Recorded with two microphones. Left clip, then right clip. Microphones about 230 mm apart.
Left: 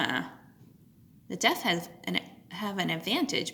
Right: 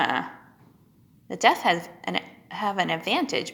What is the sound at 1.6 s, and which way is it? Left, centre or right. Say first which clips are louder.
Speech: right 6 dB; left.